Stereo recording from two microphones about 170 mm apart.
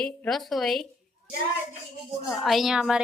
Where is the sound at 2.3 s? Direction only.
Centre (ahead or behind).